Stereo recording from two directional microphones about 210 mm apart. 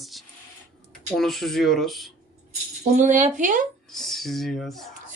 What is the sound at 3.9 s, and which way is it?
Speech, centre (ahead or behind).